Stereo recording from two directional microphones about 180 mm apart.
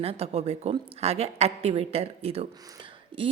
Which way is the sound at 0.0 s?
35° right (ahead or behind).